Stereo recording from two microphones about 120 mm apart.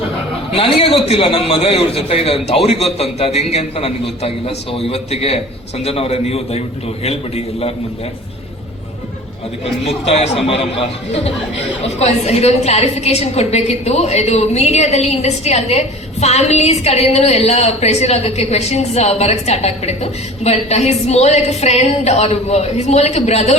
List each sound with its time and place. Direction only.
0.5 s a woman's voice: 50° left (ahead or behind)
10.4 s a woman's voice: 55° left (ahead or behind)